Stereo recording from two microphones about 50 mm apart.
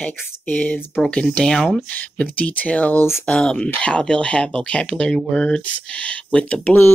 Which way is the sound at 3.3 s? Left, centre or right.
Centre.